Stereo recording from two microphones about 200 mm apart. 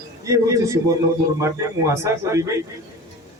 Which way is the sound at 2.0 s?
15° right (ahead or behind).